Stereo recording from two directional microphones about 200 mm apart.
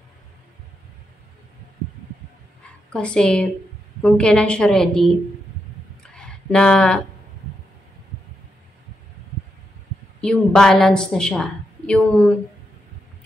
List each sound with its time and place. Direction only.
2.9 s a woman's voice: 5° left (ahead or behind)
6.1 s a sound: 5° left (ahead or behind)
10.2 s a woman's voice: 5° left (ahead or behind)